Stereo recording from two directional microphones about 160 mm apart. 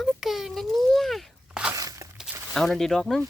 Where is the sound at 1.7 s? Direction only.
20° right (ahead or behind).